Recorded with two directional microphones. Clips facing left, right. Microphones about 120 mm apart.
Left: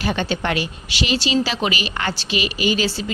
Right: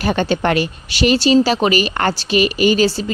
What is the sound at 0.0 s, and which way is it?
Speech, 45° right (ahead or behind).